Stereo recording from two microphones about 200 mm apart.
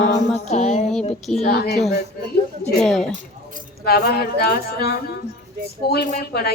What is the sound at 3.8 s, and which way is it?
A woman's voice, 50° left (ahead or behind).